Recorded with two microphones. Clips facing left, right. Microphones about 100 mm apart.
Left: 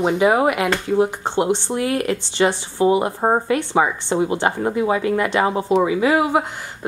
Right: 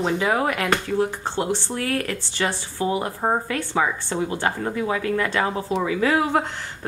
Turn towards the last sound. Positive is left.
turn(degrees=10)  # may be behind; listen again after turning